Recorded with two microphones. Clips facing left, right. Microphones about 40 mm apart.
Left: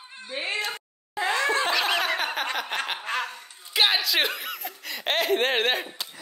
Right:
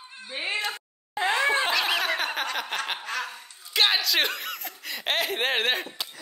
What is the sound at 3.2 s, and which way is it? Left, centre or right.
Speech, centre.